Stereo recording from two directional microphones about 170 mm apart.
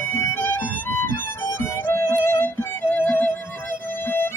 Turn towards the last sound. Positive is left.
turn(degrees=10)  # may be behind; listen again after turning